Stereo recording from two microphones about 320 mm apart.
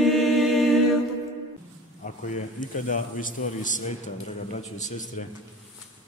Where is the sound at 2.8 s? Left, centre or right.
Left.